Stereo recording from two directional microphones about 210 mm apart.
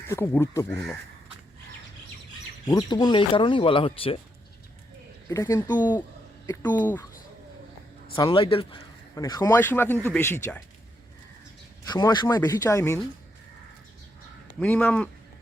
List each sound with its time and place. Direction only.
0.1 s a man's voice: 10° left (ahead or behind)
2.6 s speech: 20° left (ahead or behind)
5.3 s a man's voice: 15° left (ahead or behind)
8.1 s a man's voice: 20° left (ahead or behind)
11.9 s speech: 20° left (ahead or behind)
14.6 s a man's voice: 10° left (ahead or behind)